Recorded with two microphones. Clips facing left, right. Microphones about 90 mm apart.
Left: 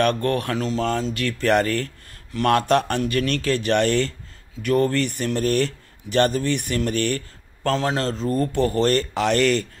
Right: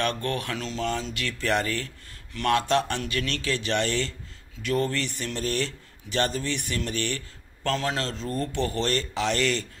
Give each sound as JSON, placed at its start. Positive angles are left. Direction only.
{"t": 0.0, "sound": "speech", "side_deg": 45}